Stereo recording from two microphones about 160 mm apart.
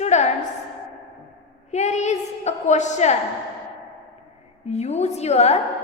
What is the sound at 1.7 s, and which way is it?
A woman's voice, 45° left (ahead or behind).